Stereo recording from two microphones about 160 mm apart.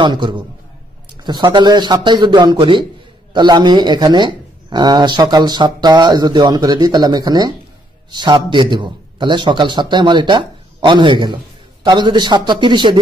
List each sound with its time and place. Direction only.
0.0 s a man's voice: 30° right (ahead or behind)